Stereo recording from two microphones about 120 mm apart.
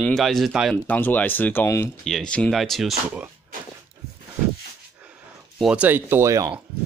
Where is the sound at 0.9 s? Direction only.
15° left (ahead or behind).